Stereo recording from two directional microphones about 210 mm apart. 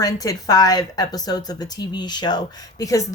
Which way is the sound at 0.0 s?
15° left (ahead or behind).